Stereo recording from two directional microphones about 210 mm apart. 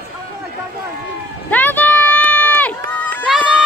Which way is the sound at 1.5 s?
10° left (ahead or behind).